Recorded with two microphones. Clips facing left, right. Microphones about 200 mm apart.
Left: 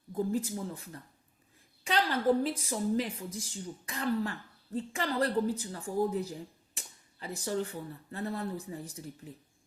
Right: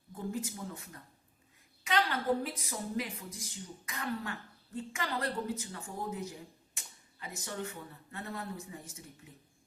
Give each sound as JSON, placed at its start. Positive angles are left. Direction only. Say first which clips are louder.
{"t": 0.1, "sound": "speech", "louder": "left 7 dB", "side_deg": 35}
{"t": 2.4, "sound": "speech", "louder": "left 7 dB", "side_deg": 30}
{"t": 6.7, "sound": "a sound", "louder": "left 4 dB", "side_deg": 35}
{"t": 8.1, "sound": "speech", "louder": "left 6 dB", "side_deg": 35}